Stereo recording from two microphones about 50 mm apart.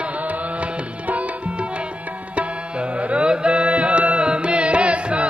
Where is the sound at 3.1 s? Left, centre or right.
Right.